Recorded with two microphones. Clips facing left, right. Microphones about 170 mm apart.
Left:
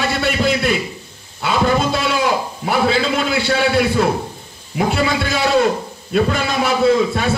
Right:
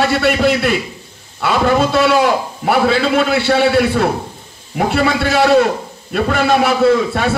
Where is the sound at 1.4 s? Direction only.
65° right (ahead or behind).